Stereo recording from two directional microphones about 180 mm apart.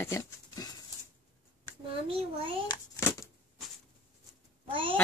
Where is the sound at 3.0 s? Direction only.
15° left (ahead or behind).